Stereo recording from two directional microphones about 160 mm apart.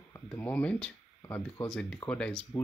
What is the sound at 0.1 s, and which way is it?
Speech, 10° left (ahead or behind).